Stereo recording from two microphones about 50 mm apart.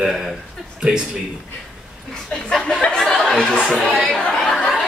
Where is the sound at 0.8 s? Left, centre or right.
Centre.